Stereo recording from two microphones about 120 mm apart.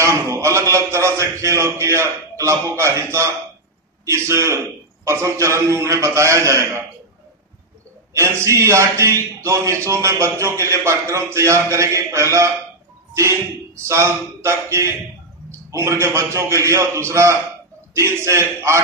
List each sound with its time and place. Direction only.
0.0 s a man's voice: 25° right (ahead or behind)
8.1 s a man's voice: 25° right (ahead or behind)